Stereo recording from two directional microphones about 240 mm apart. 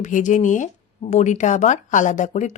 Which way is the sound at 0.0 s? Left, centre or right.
Left.